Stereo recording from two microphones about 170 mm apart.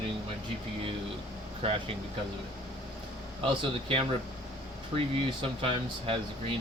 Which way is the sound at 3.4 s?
30° right (ahead or behind).